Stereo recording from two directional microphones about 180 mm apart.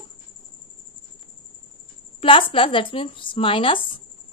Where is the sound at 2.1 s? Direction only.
30° left (ahead or behind).